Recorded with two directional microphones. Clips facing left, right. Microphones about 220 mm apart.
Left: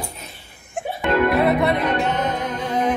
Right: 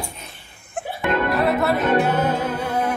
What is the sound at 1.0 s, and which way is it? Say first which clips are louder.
Music: left 3 dB; centre (ahead or behind).